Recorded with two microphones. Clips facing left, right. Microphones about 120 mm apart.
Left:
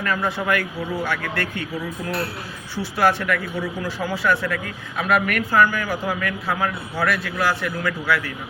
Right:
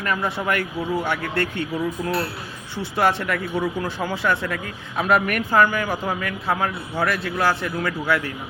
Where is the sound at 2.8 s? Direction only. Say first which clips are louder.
Left 1 dB; 20° right (ahead or behind).